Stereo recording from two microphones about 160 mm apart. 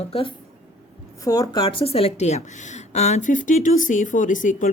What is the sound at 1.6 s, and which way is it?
A woman's voice, 35° left (ahead or behind).